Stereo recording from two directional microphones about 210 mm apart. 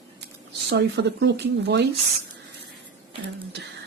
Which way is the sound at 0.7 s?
55° right (ahead or behind).